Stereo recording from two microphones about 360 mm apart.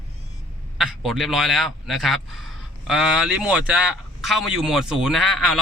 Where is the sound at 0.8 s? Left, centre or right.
Centre.